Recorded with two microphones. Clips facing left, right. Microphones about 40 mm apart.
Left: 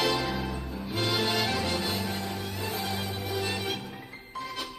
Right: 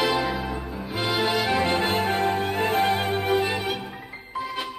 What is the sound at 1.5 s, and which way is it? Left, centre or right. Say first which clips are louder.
Music: right 8 dB; right.